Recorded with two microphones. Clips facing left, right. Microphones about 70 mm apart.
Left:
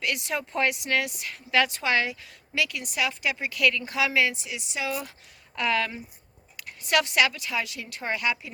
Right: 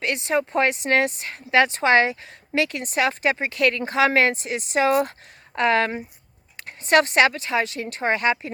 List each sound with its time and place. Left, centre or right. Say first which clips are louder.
0.0 s speech: right 7 dB; right